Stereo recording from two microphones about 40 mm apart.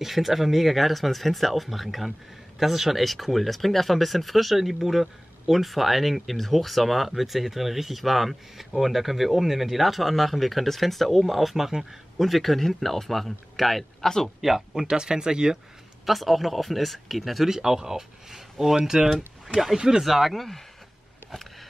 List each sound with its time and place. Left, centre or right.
0.0 s speech: centre
14.4 s speech: centre
16.1 s speech: centre
17.5 s speech: centre